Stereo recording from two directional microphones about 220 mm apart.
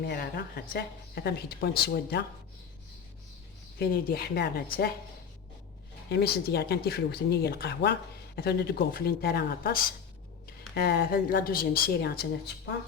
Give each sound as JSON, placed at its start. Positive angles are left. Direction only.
{"t": 0.0, "sound": "a woman's voice", "side_deg": 45}
{"t": 3.8, "sound": "a woman's voice", "side_deg": 45}
{"t": 6.1, "sound": "a woman's voice", "side_deg": 45}